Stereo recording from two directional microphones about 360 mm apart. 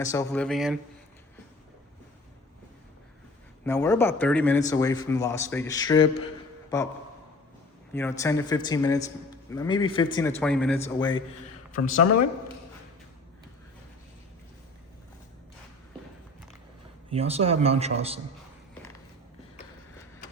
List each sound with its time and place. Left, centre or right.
0.0 s speech: centre
3.6 s speech: centre
7.9 s speech: centre
11.8 s speech: left
17.1 s speech: centre